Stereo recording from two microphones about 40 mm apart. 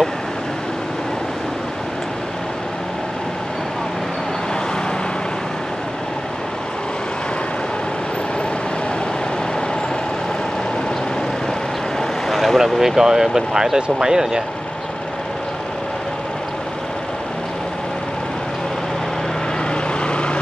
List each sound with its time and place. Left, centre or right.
12.3 s vehicle: centre
12.5 s speech: centre
13.7 s speech: right
20.0 s vehicle: left